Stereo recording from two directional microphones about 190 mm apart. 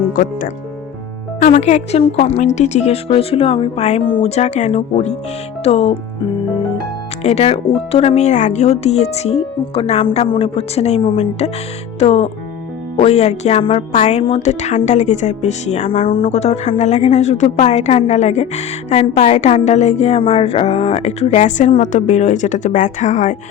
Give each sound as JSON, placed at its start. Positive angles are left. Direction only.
{"t": 0.1, "sound": "speech", "side_deg": 45}
{"t": 7.2, "sound": "speech", "side_deg": 35}